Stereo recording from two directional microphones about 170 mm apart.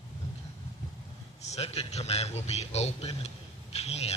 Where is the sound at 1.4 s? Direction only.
40° left (ahead or behind).